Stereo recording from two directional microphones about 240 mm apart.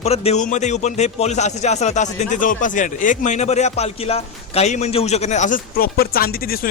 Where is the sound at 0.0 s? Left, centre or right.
Left.